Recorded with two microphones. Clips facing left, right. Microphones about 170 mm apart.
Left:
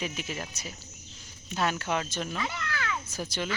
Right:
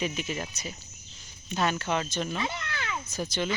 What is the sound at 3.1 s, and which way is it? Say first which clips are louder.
Speech: right 3 dB; 10° left (ahead or behind).